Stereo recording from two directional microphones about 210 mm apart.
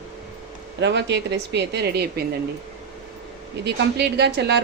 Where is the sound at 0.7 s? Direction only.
55° right (ahead or behind).